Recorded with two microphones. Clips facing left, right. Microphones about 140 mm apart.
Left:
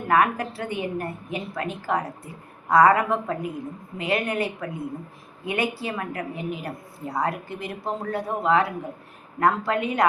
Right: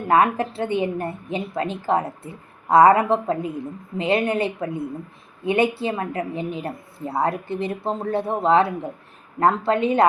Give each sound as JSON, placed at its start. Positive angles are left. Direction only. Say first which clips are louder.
{"t": 0.1, "sound": "a woman's voice", "louder": "right 3 dB", "side_deg": -25}